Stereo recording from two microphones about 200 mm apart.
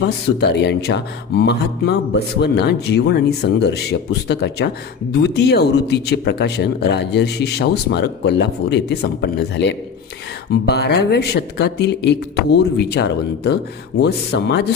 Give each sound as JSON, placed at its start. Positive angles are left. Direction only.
{"t": 0.3, "sound": "speech", "side_deg": 60}